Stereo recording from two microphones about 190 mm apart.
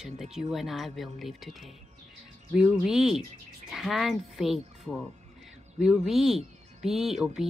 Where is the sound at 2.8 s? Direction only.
5° right (ahead or behind).